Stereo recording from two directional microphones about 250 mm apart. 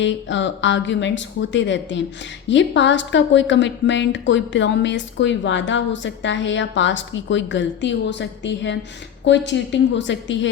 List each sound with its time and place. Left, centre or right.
0.0 s a woman's voice: left